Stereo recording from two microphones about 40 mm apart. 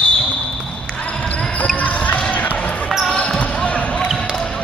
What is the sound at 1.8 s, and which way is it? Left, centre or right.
Basketball bounce, left.